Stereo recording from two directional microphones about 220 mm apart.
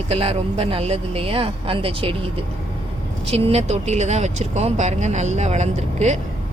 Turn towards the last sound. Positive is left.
turn(degrees=-30)  # may be behind; listen again after turning